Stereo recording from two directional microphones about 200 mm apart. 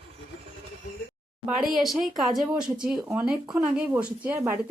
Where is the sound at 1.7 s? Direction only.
Centre (ahead or behind).